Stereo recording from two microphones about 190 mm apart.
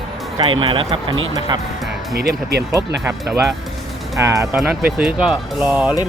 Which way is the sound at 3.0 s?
15° right (ahead or behind).